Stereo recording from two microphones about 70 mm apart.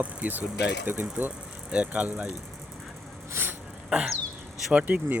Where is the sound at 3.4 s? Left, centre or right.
Right.